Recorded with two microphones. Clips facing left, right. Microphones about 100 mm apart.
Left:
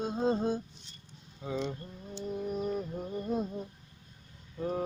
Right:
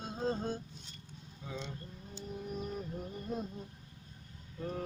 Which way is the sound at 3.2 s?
50° left (ahead or behind).